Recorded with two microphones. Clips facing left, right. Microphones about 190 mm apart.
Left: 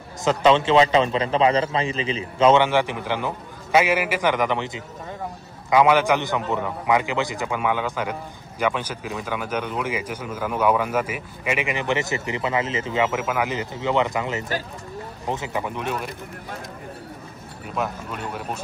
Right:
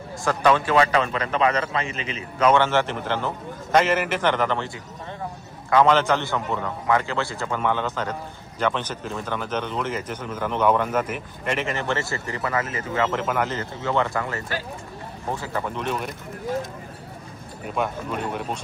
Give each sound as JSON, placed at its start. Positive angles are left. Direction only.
{"t": 0.2, "sound": "a man's voice", "side_deg": 20}
{"t": 2.6, "sound": "a man's voice", "side_deg": 15}
{"t": 13.0, "sound": "a man's voice", "side_deg": 5}
{"t": 17.6, "sound": "speech", "side_deg": 0}